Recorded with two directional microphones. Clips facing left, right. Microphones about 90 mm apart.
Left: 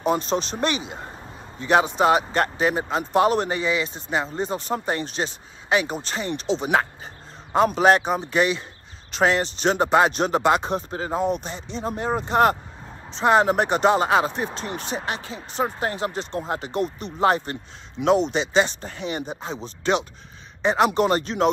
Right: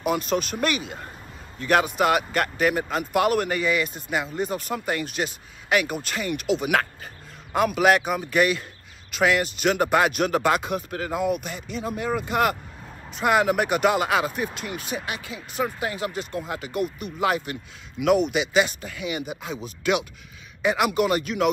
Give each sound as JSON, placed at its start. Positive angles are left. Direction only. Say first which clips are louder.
{"t": 0.0, "sound": "speech", "louder": "left 2 dB", "side_deg": 30}